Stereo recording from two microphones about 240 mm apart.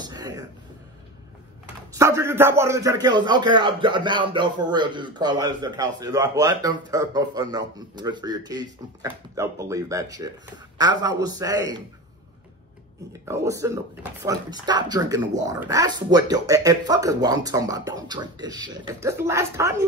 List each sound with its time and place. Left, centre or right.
0.0 s a sound: centre
2.0 s a man's voice: centre
13.1 s a man's voice: centre